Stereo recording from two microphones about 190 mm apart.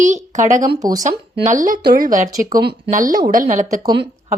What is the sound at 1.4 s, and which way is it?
Speech, 45° right (ahead or behind).